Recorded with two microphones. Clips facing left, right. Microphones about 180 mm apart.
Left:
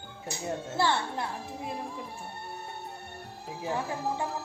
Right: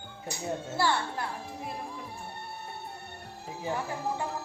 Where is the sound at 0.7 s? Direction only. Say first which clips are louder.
Left 1 dB; 20° left (ahead or behind).